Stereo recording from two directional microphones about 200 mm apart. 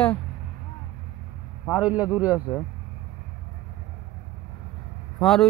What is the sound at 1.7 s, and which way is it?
Speech, 5° right (ahead or behind).